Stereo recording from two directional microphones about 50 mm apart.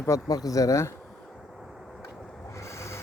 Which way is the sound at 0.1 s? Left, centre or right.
Left.